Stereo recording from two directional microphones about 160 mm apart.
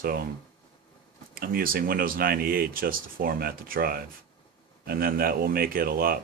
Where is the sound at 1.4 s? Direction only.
65° right (ahead or behind).